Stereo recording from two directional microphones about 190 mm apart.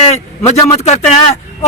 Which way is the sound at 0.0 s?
35° left (ahead or behind).